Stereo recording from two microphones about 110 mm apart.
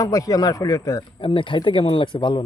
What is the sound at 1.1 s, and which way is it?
Speech, 50° left (ahead or behind).